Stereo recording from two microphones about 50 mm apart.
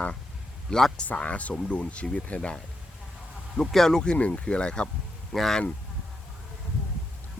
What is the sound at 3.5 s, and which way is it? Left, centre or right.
Speech, centre.